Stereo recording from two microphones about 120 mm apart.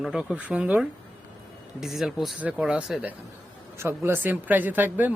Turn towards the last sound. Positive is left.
turn(degrees=-15)  # may be behind; listen again after turning